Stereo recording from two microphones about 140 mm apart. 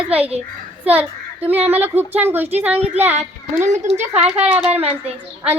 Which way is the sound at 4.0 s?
50° right (ahead or behind).